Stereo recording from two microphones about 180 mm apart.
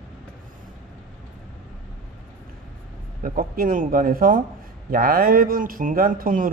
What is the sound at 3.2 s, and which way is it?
Speech, 50° right (ahead or behind).